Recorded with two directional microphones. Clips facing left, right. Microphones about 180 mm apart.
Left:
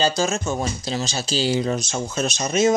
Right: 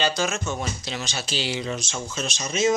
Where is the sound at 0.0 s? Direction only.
40° left (ahead or behind).